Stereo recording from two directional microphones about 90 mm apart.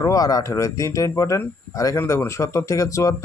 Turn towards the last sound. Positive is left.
turn(degrees=35)  # may be behind; listen again after turning